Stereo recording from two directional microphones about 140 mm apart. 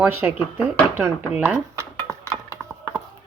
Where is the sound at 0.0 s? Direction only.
10° right (ahead or behind).